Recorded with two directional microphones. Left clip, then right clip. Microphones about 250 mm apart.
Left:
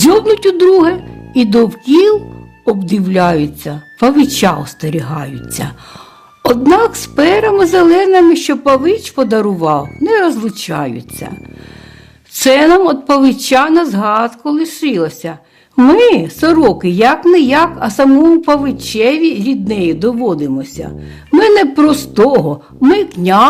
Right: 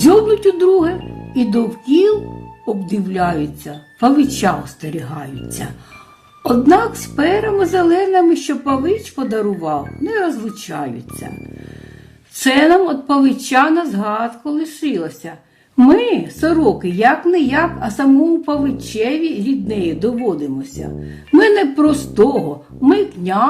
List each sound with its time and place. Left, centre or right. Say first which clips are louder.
0.1 s a woman's voice: left 2 dB; left
12.4 s a woman's voice: left 4 dB; left